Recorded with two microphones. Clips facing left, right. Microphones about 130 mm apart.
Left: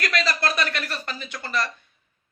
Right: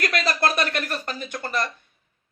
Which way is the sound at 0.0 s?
50° right (ahead or behind).